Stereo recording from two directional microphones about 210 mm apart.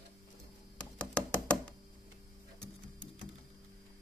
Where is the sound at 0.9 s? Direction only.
5° left (ahead or behind).